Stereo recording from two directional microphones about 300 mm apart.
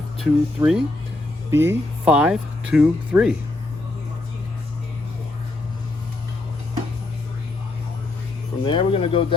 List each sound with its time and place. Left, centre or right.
0.2 s speech: centre
8.6 s speech: centre